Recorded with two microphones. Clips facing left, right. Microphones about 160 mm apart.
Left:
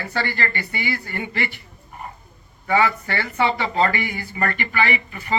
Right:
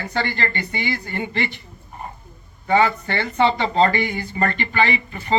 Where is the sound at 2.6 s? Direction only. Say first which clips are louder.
Right 2 dB; 20° right (ahead or behind).